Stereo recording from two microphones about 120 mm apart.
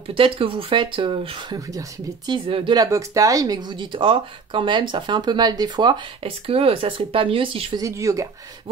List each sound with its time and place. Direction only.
0.1 s speech: 50° right (ahead or behind)
1.7 s speech: 30° right (ahead or behind)
2.3 s speech: 45° right (ahead or behind)
2.8 s speech: 30° right (ahead or behind)
6.4 s speech: 50° right (ahead or behind)
7.7 s speech: 25° right (ahead or behind)